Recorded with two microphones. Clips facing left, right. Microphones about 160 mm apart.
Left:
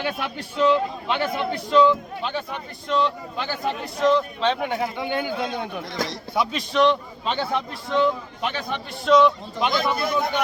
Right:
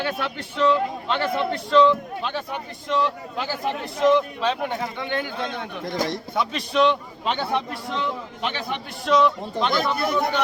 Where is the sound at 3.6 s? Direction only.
15° right (ahead or behind).